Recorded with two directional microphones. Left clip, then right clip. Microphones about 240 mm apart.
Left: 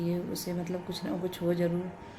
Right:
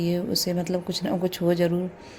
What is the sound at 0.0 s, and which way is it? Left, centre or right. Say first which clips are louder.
Speech: right 8 dB; right.